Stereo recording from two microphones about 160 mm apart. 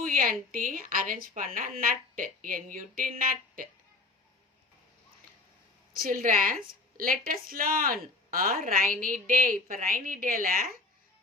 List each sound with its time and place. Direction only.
0.0 s a woman's voice: 60° right (ahead or behind)
5.9 s a woman's voice: 60° right (ahead or behind)